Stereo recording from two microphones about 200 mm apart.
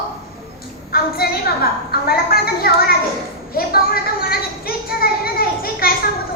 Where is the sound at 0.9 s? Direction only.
50° left (ahead or behind).